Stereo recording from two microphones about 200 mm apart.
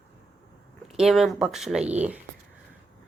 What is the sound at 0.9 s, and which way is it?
Speech, centre (ahead or behind).